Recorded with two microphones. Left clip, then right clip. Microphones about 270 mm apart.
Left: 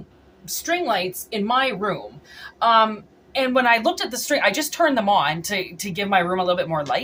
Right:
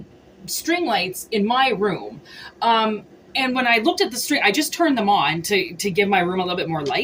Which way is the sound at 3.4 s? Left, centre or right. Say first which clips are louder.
Left 1 dB; left.